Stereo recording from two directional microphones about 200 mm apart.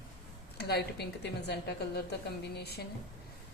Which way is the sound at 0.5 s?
55° left (ahead or behind).